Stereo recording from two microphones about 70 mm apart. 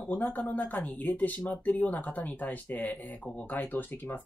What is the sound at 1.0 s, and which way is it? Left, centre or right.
Speech, left.